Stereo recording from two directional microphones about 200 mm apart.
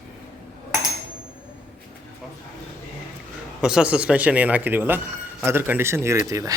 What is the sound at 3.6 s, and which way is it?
Speech, 5° right (ahead or behind).